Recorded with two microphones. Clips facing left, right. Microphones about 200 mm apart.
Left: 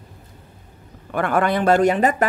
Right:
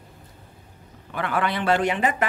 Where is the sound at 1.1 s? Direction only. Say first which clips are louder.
Left 6 dB; 50° left (ahead or behind).